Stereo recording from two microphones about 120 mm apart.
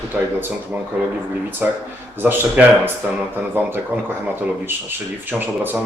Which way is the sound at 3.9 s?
15° right (ahead or behind).